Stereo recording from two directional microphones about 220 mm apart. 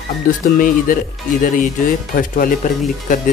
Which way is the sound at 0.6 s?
40° left (ahead or behind).